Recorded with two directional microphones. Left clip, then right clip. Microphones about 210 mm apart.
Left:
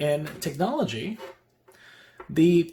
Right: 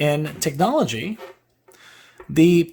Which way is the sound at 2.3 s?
40° right (ahead or behind).